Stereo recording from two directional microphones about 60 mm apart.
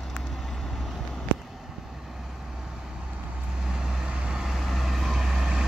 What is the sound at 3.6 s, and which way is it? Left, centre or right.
Vehicle, centre.